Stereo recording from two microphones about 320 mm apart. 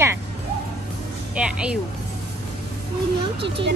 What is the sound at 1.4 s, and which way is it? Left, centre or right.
Speech, centre.